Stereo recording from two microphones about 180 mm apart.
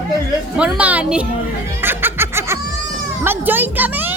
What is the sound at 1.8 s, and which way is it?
Music, 10° right (ahead or behind).